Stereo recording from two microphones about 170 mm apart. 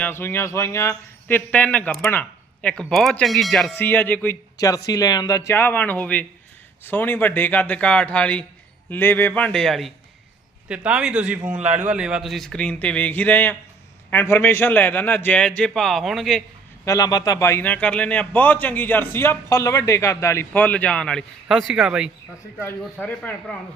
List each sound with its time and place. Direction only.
0.0 s a man's voice: 15° left (ahead or behind)
16.8 s a man's voice: 20° left (ahead or behind); by 22.1 s 5° right (ahead or behind)
23.0 s a man's voice: 10° left (ahead or behind)